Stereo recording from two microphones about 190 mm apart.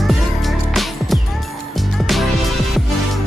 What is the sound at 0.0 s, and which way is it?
Music, centre (ahead or behind).